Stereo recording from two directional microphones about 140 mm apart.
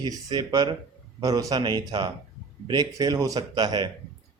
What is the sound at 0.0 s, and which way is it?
A man's voice, 30° right (ahead or behind).